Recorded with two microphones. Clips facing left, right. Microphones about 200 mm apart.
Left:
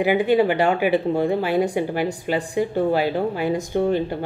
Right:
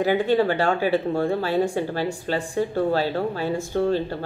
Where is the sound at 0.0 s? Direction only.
15° left (ahead or behind).